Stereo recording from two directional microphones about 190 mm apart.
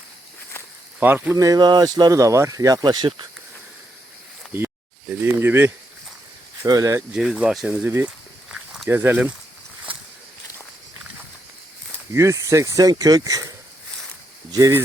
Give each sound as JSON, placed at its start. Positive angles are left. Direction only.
{"t": 0.9, "sound": "speech", "side_deg": -10}
{"t": 4.5, "sound": "speech", "side_deg": -10}
{"t": 7.1, "sound": "speech", "side_deg": -5}
{"t": 8.4, "sound": "walk", "side_deg": 0}
{"t": 8.9, "sound": "speech", "side_deg": -10}
{"t": 12.1, "sound": "speech", "side_deg": -15}
{"t": 14.5, "sound": "speech", "side_deg": -20}